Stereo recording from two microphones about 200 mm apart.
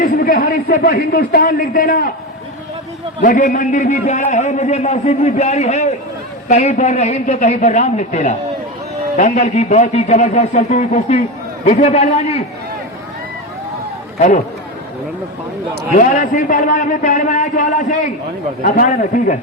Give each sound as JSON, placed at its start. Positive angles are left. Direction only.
{"t": 0.0, "sound": "a man's voice", "side_deg": 45}
{"t": 3.2, "sound": "a man's voice", "side_deg": 40}
{"t": 14.2, "sound": "a man's voice", "side_deg": 35}
{"t": 15.9, "sound": "a man's voice", "side_deg": 40}